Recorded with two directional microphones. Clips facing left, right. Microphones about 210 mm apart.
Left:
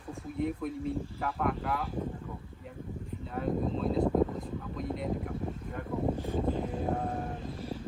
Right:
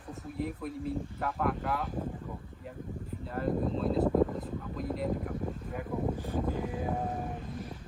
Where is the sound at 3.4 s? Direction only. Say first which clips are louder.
Even; centre (ahead or behind).